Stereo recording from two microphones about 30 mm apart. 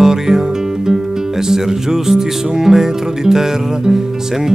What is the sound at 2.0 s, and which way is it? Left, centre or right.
Music, centre.